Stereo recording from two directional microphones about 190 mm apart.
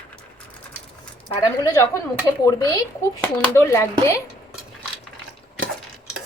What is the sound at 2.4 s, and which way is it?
Speech, 20° left (ahead or behind).